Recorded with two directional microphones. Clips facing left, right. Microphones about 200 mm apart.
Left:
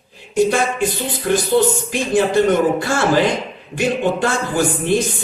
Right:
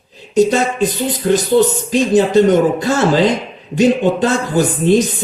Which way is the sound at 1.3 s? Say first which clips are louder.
Right 3 dB; 20° right (ahead or behind).